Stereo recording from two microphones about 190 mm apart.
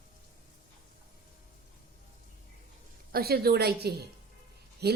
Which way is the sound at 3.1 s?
55° right (ahead or behind).